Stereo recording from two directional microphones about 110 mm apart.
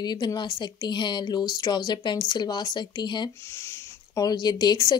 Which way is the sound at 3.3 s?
25° left (ahead or behind).